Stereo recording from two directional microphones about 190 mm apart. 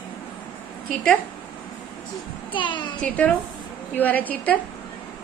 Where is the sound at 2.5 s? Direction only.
25° left (ahead or behind).